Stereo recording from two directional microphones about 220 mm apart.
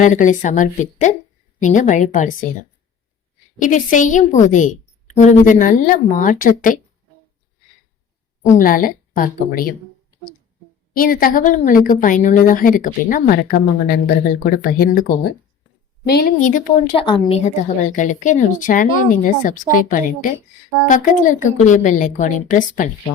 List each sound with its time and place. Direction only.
0.0 s a woman's voice: 35° left (ahead or behind)
3.6 s a woman's voice: 35° left (ahead or behind)
8.5 s a woman's voice: 40° left (ahead or behind)
10.9 s a woman's voice: 40° left (ahead or behind)